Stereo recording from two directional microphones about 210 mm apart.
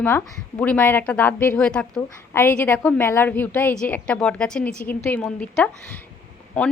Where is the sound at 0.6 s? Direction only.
5° left (ahead or behind).